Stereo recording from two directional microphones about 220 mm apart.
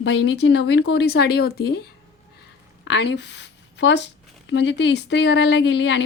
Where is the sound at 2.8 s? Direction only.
50° left (ahead or behind).